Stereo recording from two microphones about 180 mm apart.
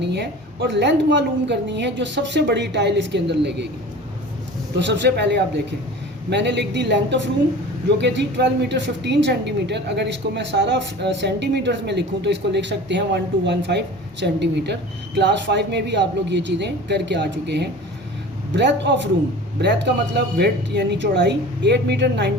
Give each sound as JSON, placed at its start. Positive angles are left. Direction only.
{"t": 0.0, "sound": "speech", "side_deg": -70}
{"t": 4.8, "sound": "a woman's voice", "side_deg": -75}